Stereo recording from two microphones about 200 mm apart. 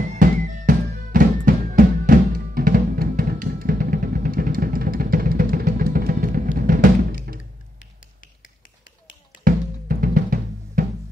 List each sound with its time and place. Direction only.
0.1 s music: 40° right (ahead or behind)
9.4 s drum: 45° right (ahead or behind)